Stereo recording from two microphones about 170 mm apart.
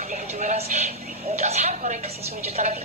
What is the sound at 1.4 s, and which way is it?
Television, 40° right (ahead or behind).